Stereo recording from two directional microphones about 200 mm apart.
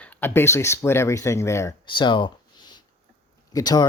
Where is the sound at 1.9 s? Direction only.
25° left (ahead or behind).